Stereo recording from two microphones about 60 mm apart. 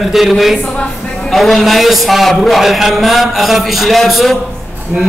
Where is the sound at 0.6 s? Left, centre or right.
Centre.